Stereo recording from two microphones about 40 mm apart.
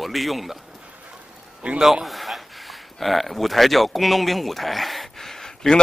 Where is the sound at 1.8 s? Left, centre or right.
Centre.